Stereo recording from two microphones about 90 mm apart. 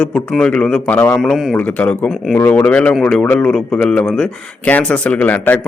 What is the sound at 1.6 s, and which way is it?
A man's voice, 15° left (ahead or behind).